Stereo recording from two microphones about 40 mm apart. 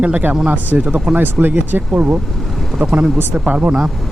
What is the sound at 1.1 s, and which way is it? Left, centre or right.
Speech, centre.